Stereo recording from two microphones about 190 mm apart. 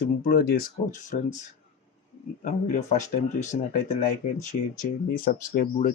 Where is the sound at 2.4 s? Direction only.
40° left (ahead or behind).